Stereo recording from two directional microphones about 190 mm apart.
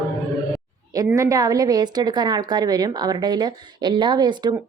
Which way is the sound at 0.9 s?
15° right (ahead or behind).